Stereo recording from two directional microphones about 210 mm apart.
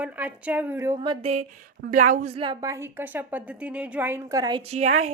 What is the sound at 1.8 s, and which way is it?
A woman's voice, 40° right (ahead or behind).